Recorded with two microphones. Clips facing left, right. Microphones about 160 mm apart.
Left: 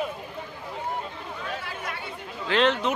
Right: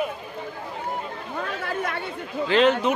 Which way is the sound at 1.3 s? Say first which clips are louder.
Right 8 dB; 55° right (ahead or behind).